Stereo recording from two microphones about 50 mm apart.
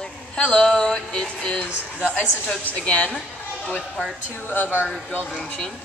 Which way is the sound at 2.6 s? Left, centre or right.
Left.